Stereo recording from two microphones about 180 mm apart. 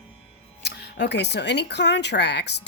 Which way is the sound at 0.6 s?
70° left (ahead or behind).